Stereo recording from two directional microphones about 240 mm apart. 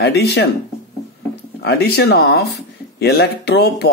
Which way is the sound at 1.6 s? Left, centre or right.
Left.